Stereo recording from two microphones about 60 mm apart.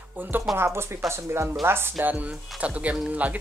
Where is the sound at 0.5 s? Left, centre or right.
Right.